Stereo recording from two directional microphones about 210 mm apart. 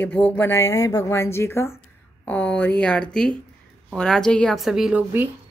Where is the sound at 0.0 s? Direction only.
10° left (ahead or behind).